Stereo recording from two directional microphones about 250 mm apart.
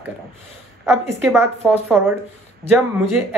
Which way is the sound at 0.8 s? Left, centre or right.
Centre.